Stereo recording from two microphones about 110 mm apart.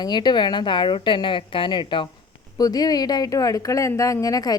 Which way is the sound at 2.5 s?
35° left (ahead or behind).